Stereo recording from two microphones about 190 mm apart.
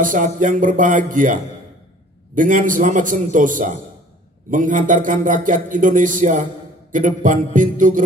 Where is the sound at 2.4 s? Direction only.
45° right (ahead or behind).